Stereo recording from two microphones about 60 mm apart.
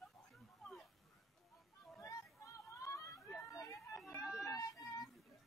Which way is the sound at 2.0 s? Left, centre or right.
Left.